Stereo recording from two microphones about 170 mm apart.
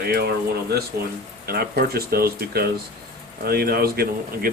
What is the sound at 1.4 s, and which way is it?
Speech, 65° right (ahead or behind).